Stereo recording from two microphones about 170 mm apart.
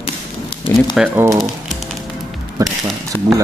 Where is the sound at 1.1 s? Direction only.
15° right (ahead or behind).